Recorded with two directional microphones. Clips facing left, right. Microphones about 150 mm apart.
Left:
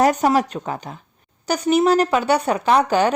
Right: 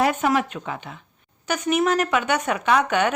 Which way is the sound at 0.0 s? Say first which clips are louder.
Left 4 dB; 40° left (ahead or behind).